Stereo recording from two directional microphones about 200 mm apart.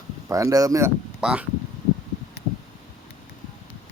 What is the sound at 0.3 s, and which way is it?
Speech, 15° right (ahead or behind).